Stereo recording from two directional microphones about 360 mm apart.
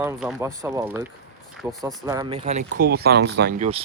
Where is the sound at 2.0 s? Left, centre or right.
Centre.